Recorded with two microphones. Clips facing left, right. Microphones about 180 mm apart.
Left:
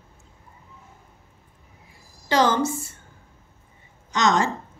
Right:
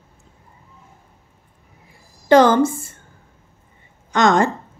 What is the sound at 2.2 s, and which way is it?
Speech, 55° right (ahead or behind).